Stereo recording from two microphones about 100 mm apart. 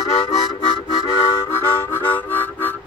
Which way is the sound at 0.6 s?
50° left (ahead or behind).